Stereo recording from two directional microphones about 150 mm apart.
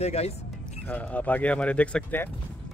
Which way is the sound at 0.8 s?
10° left (ahead or behind).